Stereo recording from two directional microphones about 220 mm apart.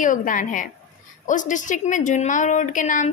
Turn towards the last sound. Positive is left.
turn(degrees=35)  # may be behind; listen again after turning